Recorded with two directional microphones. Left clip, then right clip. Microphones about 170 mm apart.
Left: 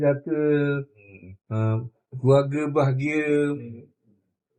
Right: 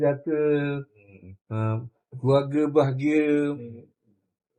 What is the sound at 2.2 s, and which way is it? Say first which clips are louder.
A man's voice: left 2 dB; 15° right (ahead or behind).